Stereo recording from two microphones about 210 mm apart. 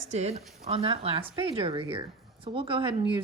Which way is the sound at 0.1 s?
30° right (ahead or behind).